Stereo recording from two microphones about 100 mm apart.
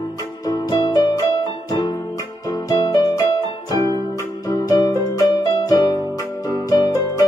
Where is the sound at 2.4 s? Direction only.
40° left (ahead or behind).